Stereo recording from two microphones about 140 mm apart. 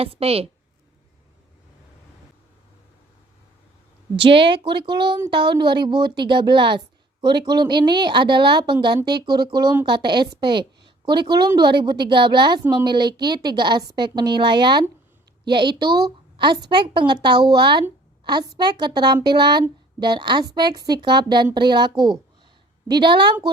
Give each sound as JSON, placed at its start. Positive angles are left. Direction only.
{"t": 0.0, "sound": "a woman's voice", "side_deg": -45}
{"t": 4.2, "sound": "a woman's voice", "side_deg": -40}